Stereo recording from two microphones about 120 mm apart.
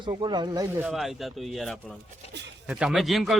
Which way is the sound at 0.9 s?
Centre (ahead or behind).